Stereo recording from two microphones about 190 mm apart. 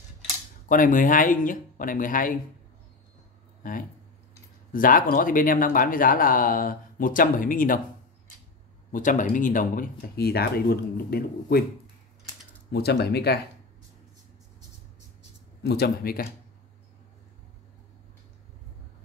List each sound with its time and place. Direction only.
0.7 s speech: 45° left (ahead or behind)
3.6 s speech: 45° left (ahead or behind)
8.9 s speech: 45° left (ahead or behind)
12.7 s speech: 60° left (ahead or behind)
15.6 s speech: 55° left (ahead or behind)